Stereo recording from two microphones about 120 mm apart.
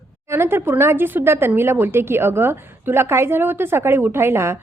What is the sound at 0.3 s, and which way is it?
A woman's voice, 20° right (ahead or behind).